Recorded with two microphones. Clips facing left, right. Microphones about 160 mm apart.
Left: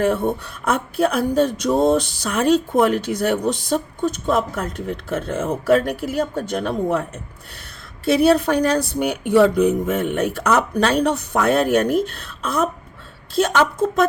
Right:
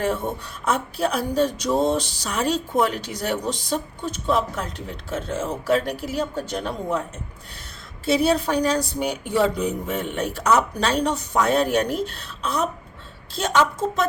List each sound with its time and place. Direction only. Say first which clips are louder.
0.0 s speech: left 5 dB; 55° left (ahead or behind)
8.0 s a woman's voice: left 5 dB; 55° left (ahead or behind)